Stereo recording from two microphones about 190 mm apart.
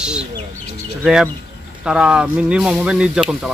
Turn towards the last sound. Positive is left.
turn(degrees=-5)  # may be behind; listen again after turning